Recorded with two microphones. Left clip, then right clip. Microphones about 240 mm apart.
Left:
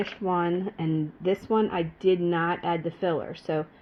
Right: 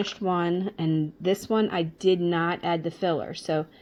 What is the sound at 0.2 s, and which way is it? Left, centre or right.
Speech, right.